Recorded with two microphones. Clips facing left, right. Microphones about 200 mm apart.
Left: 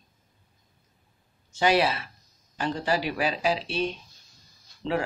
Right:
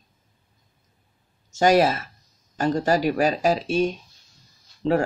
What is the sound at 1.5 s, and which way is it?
Speech, 45° right (ahead or behind).